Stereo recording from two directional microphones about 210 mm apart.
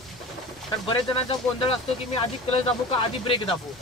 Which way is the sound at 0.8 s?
25° left (ahead or behind).